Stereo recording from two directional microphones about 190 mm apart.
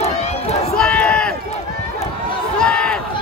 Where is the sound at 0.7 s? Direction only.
5° left (ahead or behind).